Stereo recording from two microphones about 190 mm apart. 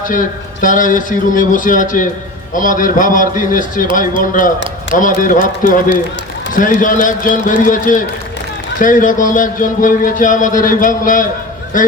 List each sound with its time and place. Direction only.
0.0 s speech: 45° left (ahead or behind)